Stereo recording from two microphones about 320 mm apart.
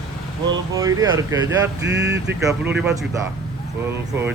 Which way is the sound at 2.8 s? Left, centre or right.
Centre.